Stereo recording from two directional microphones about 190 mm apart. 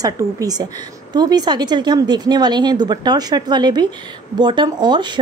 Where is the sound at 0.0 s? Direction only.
20° right (ahead or behind).